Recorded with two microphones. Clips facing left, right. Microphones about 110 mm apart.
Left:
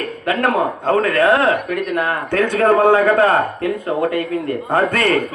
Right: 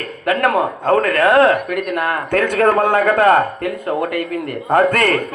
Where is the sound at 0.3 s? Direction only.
50° right (ahead or behind).